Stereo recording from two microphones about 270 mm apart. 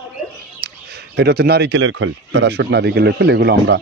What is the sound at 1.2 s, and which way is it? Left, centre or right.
Speech, right.